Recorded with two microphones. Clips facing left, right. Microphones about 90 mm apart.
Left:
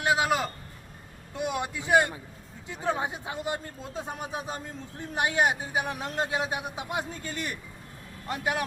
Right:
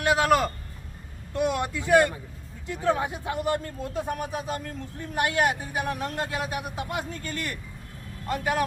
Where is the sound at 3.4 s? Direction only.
65° right (ahead or behind).